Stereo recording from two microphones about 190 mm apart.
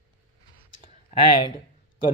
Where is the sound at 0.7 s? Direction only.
40° left (ahead or behind).